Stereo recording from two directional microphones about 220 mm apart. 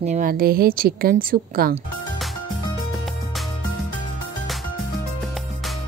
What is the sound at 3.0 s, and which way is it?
Music, centre (ahead or behind).